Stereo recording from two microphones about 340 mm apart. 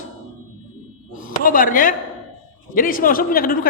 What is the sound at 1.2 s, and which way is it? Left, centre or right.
A man's voice, left.